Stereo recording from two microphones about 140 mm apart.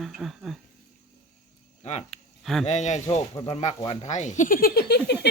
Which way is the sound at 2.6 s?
55° left (ahead or behind).